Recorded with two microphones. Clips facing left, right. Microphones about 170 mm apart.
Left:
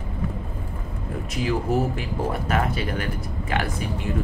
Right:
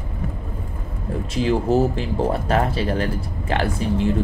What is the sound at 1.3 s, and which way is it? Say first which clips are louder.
Speech: right 5 dB; 25° right (ahead or behind).